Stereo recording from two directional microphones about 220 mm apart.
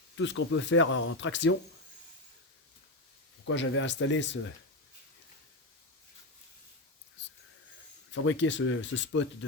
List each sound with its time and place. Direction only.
0.2 s speech: 60° left (ahead or behind)
3.4 s speech: 60° left (ahead or behind)
7.2 s wheeze: 55° left (ahead or behind)
8.1 s speech: 60° left (ahead or behind)